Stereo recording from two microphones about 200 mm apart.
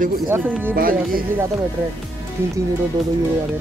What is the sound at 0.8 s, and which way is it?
Speech, 45° right (ahead or behind).